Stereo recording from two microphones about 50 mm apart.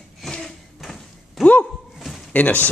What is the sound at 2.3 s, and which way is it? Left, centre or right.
Speech, left.